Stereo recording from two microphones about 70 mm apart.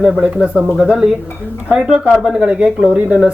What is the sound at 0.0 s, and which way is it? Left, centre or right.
Speech, centre.